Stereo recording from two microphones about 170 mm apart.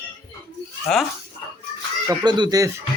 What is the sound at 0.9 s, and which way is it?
Speech, 5° left (ahead or behind).